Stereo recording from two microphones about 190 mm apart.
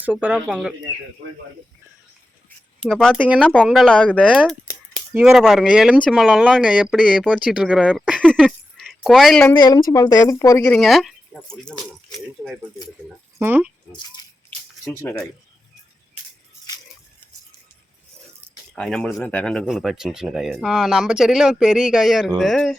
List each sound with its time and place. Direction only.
0.0 s speech: 10° right (ahead or behind)
2.8 s speech: centre (ahead or behind)
3.4 s speech: 5° left (ahead or behind)
4.3 s speech: 5° right (ahead or behind)
9.6 s speech: 20° left (ahead or behind); by 11.1 s centre (ahead or behind)
11.6 s speech: 20° left (ahead or behind)
13.4 s speech: 10° right (ahead or behind)
18.7 s speech: 5° left (ahead or behind)